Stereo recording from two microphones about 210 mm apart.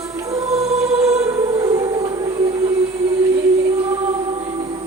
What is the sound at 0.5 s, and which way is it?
Music, 30° right (ahead or behind).